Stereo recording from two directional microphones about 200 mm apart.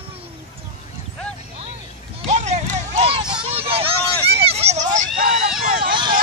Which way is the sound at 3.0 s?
25° right (ahead or behind).